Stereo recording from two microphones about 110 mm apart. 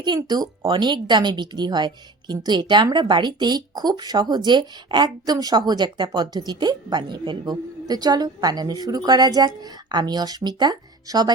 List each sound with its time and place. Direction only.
0.0 s a woman's voice: 40° right (ahead or behind)